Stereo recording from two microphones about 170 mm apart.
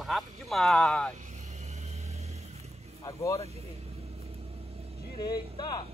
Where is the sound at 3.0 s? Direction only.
15° left (ahead or behind).